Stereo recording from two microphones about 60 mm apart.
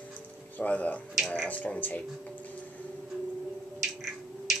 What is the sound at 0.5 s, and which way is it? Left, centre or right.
Speech, left.